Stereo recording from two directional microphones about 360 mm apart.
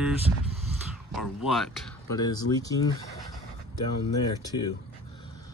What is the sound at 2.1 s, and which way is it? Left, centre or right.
Speech, centre.